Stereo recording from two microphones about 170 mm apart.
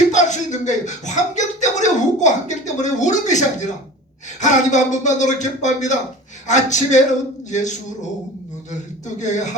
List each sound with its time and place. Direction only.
0.1 s a sound: 45° left (ahead or behind)
4.4 s speech: 45° left (ahead or behind)
9.1 s speech: 45° left (ahead or behind)